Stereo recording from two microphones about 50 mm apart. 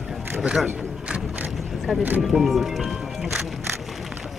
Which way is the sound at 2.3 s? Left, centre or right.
Centre.